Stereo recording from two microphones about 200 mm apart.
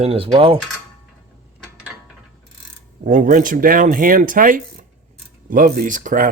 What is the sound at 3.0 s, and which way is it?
Speech, 40° right (ahead or behind).